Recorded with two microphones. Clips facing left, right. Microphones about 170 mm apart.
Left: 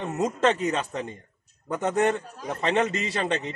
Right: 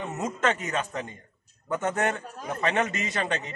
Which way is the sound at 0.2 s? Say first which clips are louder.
Left 5 dB; 35° left (ahead or behind).